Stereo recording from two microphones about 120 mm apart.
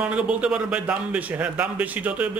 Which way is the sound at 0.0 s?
10° right (ahead or behind).